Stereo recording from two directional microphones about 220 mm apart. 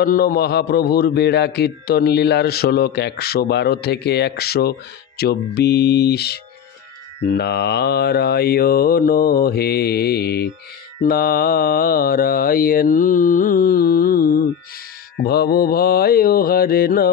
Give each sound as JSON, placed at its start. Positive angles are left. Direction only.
{"t": 0.0, "sound": "a man's voice", "side_deg": 40}
{"t": 11.0, "sound": "mantra", "side_deg": 40}
{"t": 15.2, "sound": "a man's voice", "side_deg": 45}